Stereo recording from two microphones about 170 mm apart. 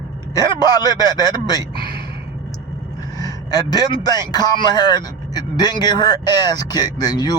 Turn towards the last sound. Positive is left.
turn(degrees=25)  # may be behind; listen again after turning